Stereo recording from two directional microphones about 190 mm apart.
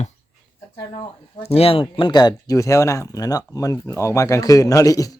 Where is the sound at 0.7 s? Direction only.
20° left (ahead or behind).